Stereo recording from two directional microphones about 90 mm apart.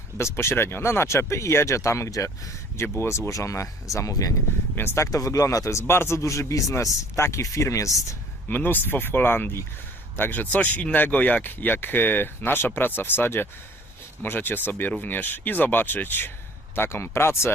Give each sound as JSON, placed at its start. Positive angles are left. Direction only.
{"t": 0.2, "sound": "a man's voice", "side_deg": 30}
{"t": 4.7, "sound": "speech", "side_deg": 25}
{"t": 5.1, "sound": "a man's voice", "side_deg": 40}
{"t": 8.4, "sound": "speech", "side_deg": 20}